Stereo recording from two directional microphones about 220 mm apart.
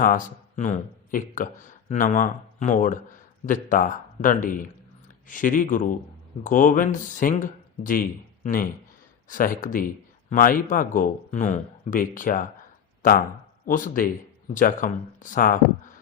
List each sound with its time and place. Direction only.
0.0 s speech: 35° left (ahead or behind)